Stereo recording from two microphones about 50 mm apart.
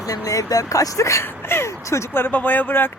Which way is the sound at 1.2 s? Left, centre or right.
Left.